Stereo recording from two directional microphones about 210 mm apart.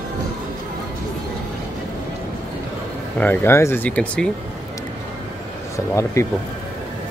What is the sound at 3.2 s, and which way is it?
Speech, 10° left (ahead or behind).